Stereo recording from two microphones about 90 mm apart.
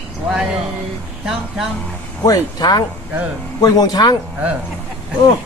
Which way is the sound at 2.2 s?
45° left (ahead or behind).